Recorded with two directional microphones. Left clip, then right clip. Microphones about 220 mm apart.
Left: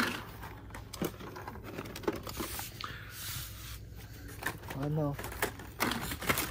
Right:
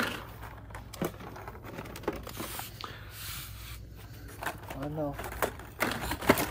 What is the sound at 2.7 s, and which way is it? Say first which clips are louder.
Snort: even; 15° right (ahead or behind).